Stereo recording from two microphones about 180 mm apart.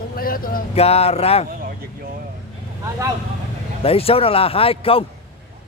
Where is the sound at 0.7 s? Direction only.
35° left (ahead or behind).